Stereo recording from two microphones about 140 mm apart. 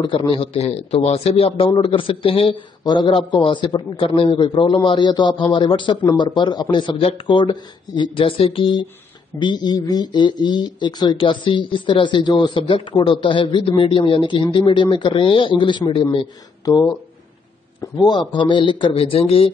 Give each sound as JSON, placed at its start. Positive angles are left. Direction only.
{"t": 0.0, "sound": "speech", "side_deg": 35}
{"t": 16.6, "sound": "speech", "side_deg": 25}
{"t": 18.0, "sound": "speech", "side_deg": 35}